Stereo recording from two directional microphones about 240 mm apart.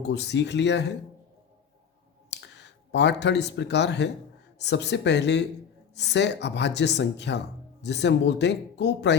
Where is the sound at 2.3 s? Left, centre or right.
Left.